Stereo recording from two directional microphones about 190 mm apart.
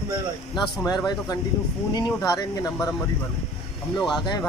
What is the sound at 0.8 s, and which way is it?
Speech, 20° left (ahead or behind).